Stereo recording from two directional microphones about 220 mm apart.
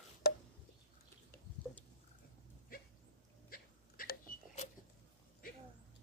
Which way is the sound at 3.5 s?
40° left (ahead or behind).